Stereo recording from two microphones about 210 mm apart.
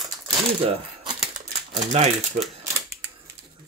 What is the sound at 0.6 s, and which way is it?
Coin, 25° right (ahead or behind).